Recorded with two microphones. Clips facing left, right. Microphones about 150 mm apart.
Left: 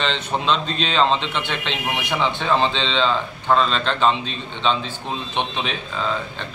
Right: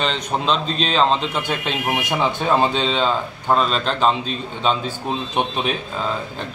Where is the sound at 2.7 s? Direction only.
45° right (ahead or behind).